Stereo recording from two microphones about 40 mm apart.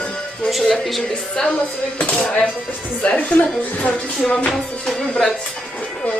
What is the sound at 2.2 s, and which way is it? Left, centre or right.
Speech, left.